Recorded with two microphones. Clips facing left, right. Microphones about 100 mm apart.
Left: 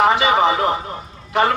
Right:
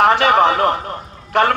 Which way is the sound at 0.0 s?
60° right (ahead or behind).